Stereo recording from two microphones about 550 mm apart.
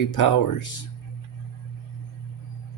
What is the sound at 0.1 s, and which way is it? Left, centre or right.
Speech, left.